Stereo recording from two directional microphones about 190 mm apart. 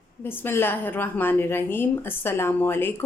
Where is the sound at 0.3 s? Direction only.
10° left (ahead or behind).